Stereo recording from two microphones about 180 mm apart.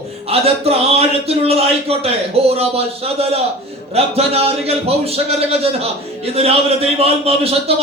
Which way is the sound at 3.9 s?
35° right (ahead or behind).